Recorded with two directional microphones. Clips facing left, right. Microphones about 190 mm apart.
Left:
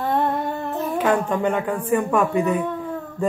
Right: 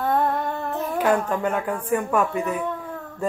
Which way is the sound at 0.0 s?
Centre (ahead or behind).